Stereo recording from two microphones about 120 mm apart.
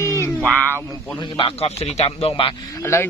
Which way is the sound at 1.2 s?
50° left (ahead or behind).